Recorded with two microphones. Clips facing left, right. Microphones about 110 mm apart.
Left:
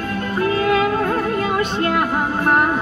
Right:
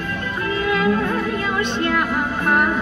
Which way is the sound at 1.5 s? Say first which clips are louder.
Left 2 dB; 40° left (ahead or behind).